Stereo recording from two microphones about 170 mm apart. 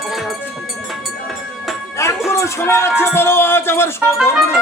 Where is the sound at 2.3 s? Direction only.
15° left (ahead or behind).